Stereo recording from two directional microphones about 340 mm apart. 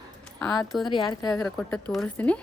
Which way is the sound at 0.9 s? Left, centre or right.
Centre.